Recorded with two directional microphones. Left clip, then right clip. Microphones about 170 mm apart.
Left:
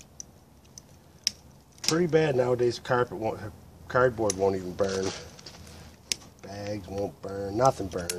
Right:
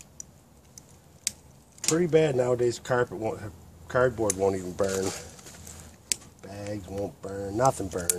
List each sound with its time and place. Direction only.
2.0 s speech: 25° right (ahead or behind)